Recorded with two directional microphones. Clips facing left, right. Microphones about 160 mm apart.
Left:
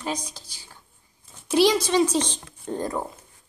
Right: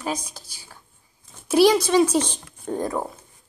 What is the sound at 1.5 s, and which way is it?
Speech, 10° right (ahead or behind).